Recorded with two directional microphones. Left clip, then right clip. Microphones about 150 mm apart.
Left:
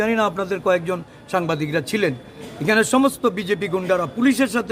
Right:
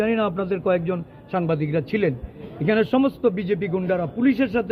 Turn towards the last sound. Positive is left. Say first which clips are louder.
# left 2 dB
turn(degrees=30)  # may be behind; listen again after turning